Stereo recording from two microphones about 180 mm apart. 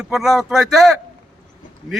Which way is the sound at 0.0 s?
Centre (ahead or behind).